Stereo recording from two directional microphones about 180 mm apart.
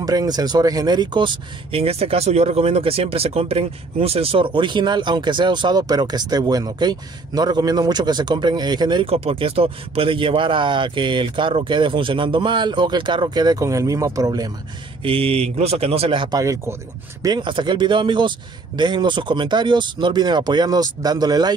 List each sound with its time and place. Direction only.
0.0 s speech: 20° right (ahead or behind)
15.0 s speech: 30° right (ahead or behind)